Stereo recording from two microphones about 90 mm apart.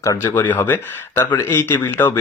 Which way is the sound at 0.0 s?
35° left (ahead or behind).